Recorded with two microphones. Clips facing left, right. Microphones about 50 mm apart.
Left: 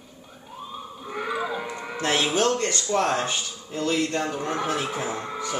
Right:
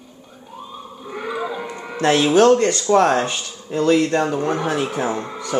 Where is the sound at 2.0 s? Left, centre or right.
Right.